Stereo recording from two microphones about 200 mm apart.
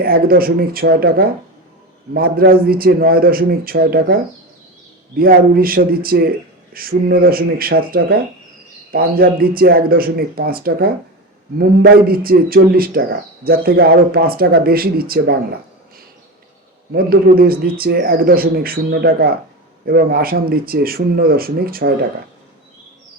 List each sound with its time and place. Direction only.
0.0 s speech: 50° right (ahead or behind)
5.1 s speech: 50° right (ahead or behind)
16.9 s speech: 50° right (ahead or behind)